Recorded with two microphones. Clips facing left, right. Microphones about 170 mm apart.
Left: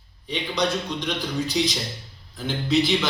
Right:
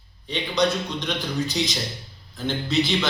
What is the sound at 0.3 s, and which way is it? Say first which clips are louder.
A man's voice: right 2 dB; 10° left (ahead or behind).